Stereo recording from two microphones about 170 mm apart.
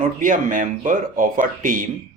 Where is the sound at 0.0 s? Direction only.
50° right (ahead or behind).